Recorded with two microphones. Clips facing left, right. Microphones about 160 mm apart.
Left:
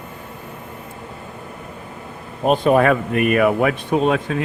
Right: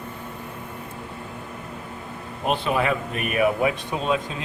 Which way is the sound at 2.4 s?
45° left (ahead or behind).